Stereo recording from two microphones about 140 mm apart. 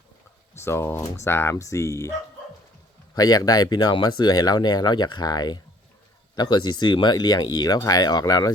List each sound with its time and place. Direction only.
0.5 s speech: 20° left (ahead or behind)
3.2 s speech: 25° left (ahead or behind)